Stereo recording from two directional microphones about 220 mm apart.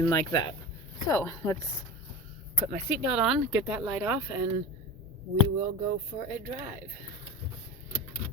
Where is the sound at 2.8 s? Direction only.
5° right (ahead or behind).